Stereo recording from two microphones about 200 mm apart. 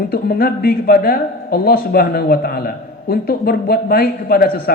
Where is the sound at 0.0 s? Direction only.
50° left (ahead or behind).